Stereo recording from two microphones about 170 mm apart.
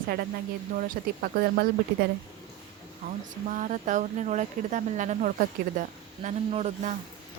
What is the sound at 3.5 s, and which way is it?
Speech, 50° right (ahead or behind).